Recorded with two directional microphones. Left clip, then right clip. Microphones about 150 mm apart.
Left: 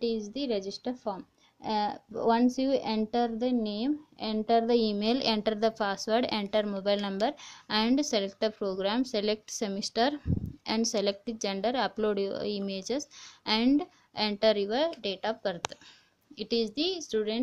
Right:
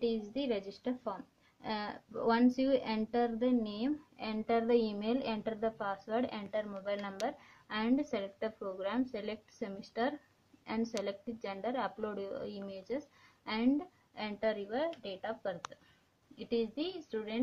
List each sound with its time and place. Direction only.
0.0 s a woman's voice: 40° left (ahead or behind)